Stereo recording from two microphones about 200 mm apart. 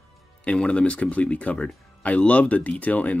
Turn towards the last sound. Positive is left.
turn(degrees=5)  # may be behind; listen again after turning